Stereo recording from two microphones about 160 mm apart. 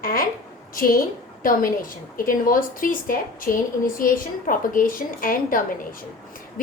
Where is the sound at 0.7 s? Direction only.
65° left (ahead or behind).